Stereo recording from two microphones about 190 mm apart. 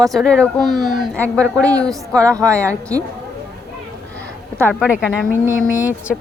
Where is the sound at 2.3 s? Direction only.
15° right (ahead or behind).